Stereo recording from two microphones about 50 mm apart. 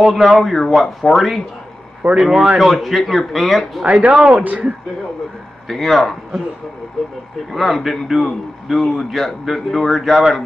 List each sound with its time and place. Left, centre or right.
0.0 s a man's voice: centre
2.0 s speech: right
2.6 s a man's voice: centre
3.8 s speech: right
5.7 s a man's voice: centre
7.5 s a man's voice: centre